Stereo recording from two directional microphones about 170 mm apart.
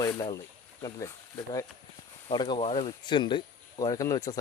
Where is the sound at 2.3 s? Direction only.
25° left (ahead or behind).